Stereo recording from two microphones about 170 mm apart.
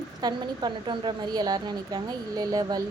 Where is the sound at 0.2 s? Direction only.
25° right (ahead or behind).